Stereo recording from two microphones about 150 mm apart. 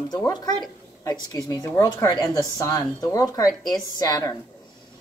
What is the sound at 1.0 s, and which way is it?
Speech, 25° left (ahead or behind).